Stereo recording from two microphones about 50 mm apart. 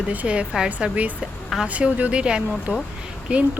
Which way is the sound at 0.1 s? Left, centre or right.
Right.